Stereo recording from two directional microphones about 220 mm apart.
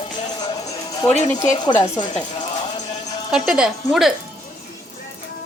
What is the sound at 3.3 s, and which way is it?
Speech, 5° right (ahead or behind).